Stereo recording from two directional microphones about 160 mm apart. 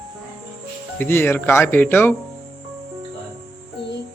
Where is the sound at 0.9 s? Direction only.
15° left (ahead or behind).